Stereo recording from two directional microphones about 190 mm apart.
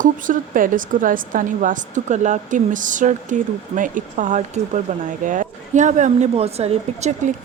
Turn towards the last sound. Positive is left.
turn(degrees=-40)  # may be behind; listen again after turning